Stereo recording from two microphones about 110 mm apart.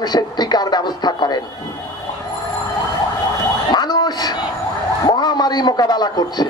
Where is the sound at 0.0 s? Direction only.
40° left (ahead or behind).